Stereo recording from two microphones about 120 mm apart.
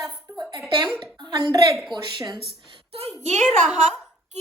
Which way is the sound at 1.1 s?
35° right (ahead or behind).